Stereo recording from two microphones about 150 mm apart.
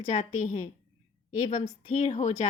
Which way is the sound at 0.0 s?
55° left (ahead or behind).